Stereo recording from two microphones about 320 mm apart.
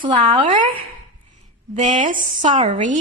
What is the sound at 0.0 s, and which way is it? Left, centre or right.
Speech, centre.